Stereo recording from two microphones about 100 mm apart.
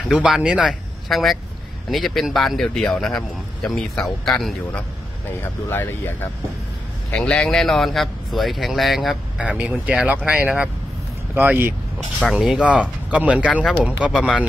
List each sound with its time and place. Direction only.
0.1 s speech: 5° right (ahead or behind)
5.7 s speech: 20° left (ahead or behind)
7.1 s speech: 10° left (ahead or behind)
9.4 s speech: 10° right (ahead or behind)
12.4 s speech: 10° right (ahead or behind)